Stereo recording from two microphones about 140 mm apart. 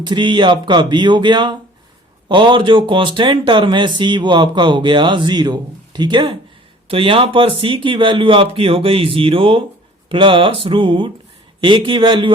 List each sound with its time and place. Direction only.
0.0 s speech: 35° right (ahead or behind)